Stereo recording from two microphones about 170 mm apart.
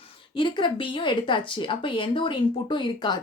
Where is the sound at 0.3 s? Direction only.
30° left (ahead or behind).